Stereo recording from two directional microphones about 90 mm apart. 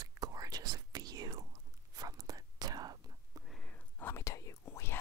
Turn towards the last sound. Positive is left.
turn(degrees=30)  # may be behind; listen again after turning